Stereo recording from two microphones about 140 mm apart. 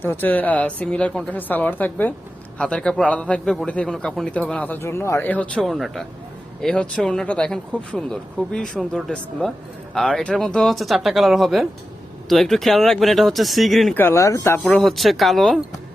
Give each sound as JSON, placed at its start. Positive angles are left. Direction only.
{"t": 0.0, "sound": "a man's voice", "side_deg": 15}
{"t": 13.9, "sound": "a man's voice", "side_deg": 15}
{"t": 14.7, "sound": "speech", "side_deg": 0}